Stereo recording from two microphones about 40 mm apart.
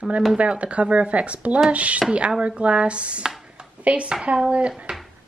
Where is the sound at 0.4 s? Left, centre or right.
Right.